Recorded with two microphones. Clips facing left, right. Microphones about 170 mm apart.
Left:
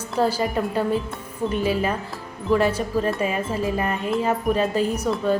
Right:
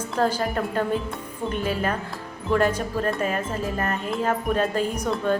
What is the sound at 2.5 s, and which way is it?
Wind chime, 5° left (ahead or behind).